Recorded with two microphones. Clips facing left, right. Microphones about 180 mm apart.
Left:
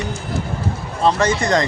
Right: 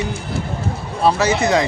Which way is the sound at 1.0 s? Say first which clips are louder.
Right 1 dB; 5° right (ahead or behind).